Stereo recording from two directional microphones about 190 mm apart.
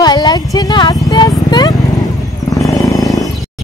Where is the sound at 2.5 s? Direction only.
15° left (ahead or behind).